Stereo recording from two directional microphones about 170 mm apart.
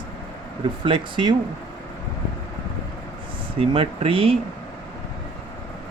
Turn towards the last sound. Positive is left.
turn(degrees=-35)  # may be behind; listen again after turning